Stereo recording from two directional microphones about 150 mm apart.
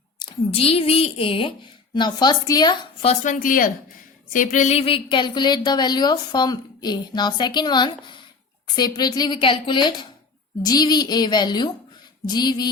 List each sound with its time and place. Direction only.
0.2 s a woman's voice: 40° left (ahead or behind)
3.0 s speech: 45° left (ahead or behind)
3.4 s speech: 65° left (ahead or behind); by 12.6 s 25° left (ahead or behind)